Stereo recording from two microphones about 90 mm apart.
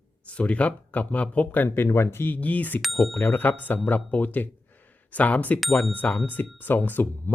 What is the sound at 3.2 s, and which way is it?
Speech, 20° left (ahead or behind).